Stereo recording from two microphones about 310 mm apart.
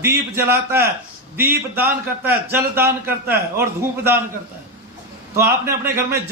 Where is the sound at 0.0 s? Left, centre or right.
Centre.